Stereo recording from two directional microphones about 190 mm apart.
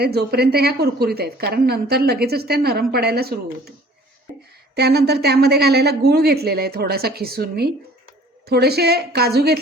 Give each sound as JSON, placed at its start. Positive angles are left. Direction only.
{"t": 0.0, "sound": "a woman's voice", "side_deg": -55}
{"t": 4.7, "sound": "a woman's voice", "side_deg": -55}